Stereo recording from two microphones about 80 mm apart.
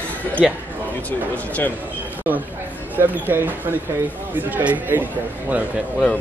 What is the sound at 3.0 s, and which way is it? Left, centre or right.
Speech, right.